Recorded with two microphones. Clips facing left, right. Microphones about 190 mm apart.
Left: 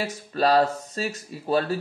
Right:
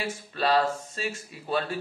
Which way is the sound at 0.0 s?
40° left (ahead or behind).